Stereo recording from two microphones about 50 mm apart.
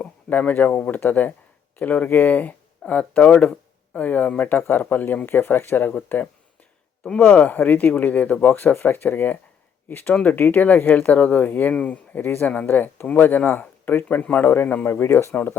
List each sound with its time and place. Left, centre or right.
0.0 s speech: left
3.9 s speech: left
7.2 s speech: left
11.7 s speech: left
12.1 s speech: left
14.4 s a man's voice: left